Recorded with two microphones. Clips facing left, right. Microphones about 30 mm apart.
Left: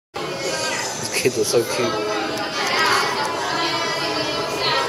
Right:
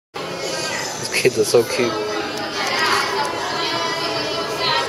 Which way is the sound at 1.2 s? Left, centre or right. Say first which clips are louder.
Right 3 dB; right.